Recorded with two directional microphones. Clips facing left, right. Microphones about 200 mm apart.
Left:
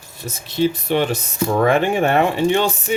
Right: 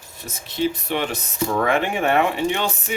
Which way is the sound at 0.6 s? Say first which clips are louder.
Left 5 dB; 35° left (ahead or behind).